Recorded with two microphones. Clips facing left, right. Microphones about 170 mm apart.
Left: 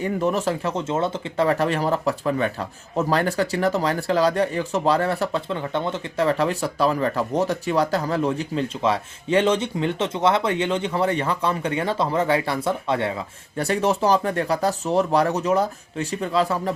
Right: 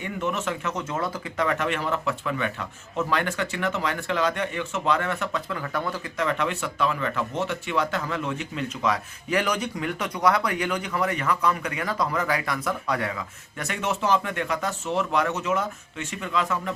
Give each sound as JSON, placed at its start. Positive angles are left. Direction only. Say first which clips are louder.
{"t": 0.0, "sound": "speech", "louder": "left 6 dB", "side_deg": 35}